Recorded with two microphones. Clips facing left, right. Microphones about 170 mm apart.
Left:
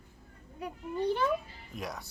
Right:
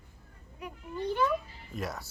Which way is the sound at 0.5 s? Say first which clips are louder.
Left 3 dB; 30° left (ahead or behind).